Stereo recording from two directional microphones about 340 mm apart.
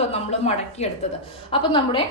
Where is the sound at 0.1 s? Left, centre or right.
Centre.